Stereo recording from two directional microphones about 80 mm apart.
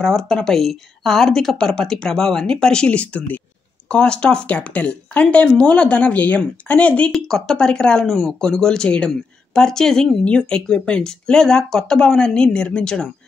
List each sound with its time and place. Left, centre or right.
0.0 s speech: centre
7.1 s speech: centre